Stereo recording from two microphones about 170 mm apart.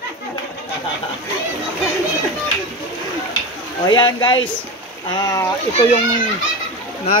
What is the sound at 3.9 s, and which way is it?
Speech, 25° left (ahead or behind).